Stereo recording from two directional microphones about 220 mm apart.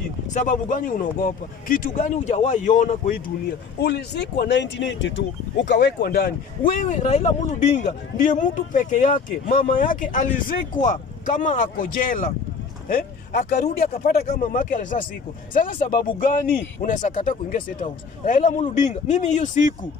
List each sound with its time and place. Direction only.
0.3 s speech: 35° left (ahead or behind)
3.8 s speech: 50° left (ahead or behind)